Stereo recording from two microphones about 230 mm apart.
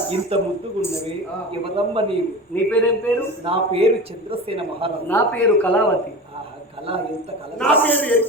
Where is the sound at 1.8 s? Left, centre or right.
Right.